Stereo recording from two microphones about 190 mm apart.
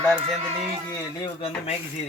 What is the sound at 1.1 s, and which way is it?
Speech, 25° left (ahead or behind).